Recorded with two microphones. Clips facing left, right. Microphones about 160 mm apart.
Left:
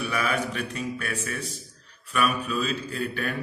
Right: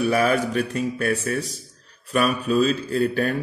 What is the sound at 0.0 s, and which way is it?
Speech, 40° right (ahead or behind).